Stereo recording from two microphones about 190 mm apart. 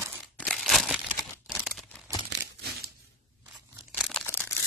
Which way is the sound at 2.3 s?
65° right (ahead or behind).